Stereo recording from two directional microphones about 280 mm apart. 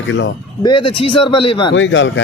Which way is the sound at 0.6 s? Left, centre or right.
Centre.